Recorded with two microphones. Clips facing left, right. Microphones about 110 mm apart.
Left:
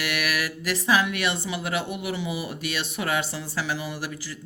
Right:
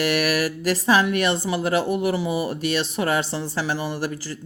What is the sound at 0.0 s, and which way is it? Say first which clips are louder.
Speech: right 7 dB; 40° right (ahead or behind).